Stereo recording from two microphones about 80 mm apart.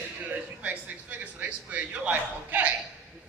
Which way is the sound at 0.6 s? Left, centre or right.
Centre.